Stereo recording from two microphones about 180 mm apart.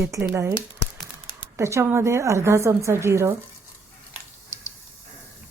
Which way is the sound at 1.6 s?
15° right (ahead or behind).